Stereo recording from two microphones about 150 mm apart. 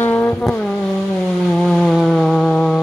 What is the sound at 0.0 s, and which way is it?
Vehicle, 10° left (ahead or behind).